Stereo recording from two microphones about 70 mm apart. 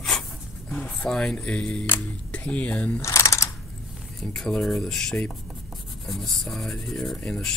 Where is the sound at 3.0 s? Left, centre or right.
Left.